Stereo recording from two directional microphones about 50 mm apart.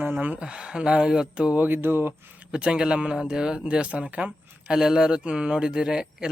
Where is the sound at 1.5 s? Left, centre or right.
Right.